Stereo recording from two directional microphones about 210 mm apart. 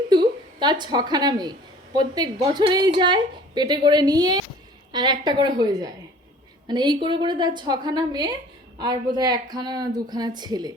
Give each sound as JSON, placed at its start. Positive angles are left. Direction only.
{"t": 0.1, "sound": "a woman's voice", "side_deg": -20}